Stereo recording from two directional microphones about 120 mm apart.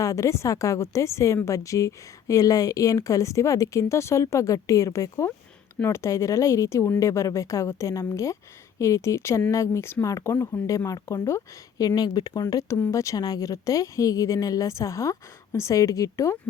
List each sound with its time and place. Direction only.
0.0 s a woman's voice: 25° left (ahead or behind)